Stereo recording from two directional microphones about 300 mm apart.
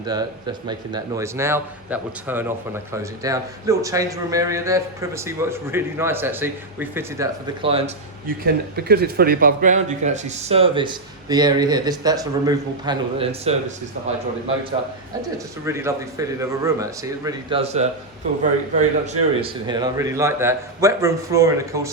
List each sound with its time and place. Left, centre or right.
0.0 s a man's voice: centre
7.6 s speech: centre
8.4 s speech: right
15.2 s a man's voice: centre